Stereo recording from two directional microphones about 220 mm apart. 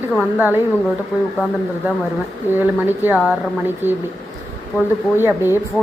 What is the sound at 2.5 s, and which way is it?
Speech, 10° right (ahead or behind).